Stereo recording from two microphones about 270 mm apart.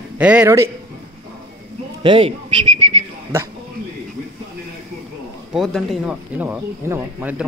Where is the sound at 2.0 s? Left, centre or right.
Centre.